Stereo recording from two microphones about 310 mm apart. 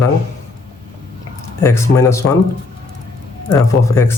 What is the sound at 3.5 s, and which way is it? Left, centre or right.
Speech, centre.